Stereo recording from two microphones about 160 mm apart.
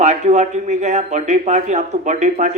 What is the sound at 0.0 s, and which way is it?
Speech, 45° right (ahead or behind).